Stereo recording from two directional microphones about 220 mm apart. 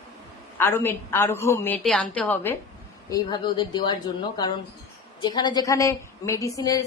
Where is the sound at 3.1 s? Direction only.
20° left (ahead or behind).